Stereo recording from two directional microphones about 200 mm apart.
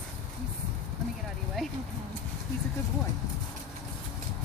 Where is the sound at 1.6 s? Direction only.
Centre (ahead or behind).